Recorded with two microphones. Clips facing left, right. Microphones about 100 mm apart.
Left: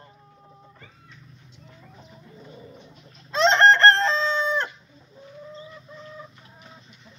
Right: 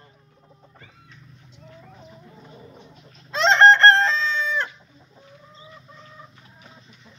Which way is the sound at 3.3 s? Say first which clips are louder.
Right 2 dB; 40° left (ahead or behind).